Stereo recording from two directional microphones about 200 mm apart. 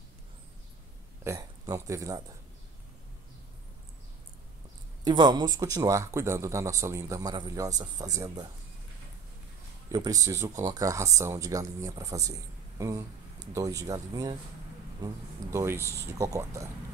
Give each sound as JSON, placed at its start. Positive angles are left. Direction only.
{"t": 1.2, "sound": "speech", "side_deg": -15}
{"t": 5.0, "sound": "a man's voice", "side_deg": -20}
{"t": 9.8, "sound": "a man's voice", "side_deg": -15}
{"t": 15.5, "sound": "a man's voice", "side_deg": -15}